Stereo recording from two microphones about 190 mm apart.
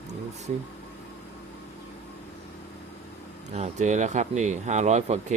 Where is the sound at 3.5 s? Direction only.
35° right (ahead or behind).